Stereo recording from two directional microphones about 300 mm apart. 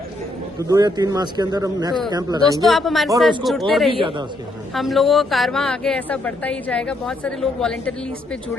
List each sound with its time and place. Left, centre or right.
0.7 s a man's voice: centre
2.6 s a woman's voice: centre